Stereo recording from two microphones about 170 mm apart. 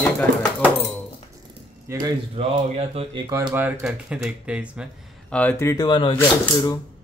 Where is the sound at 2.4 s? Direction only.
35° right (ahead or behind).